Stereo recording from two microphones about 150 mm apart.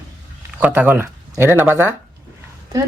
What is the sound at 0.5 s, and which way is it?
Speech, 10° right (ahead or behind).